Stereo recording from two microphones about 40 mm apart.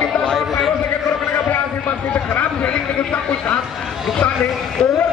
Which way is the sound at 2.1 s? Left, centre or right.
Left.